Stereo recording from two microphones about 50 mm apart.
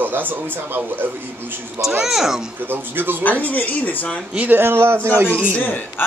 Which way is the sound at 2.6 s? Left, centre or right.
Right.